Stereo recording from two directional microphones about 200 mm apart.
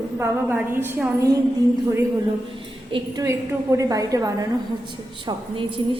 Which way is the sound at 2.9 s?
20° right (ahead or behind).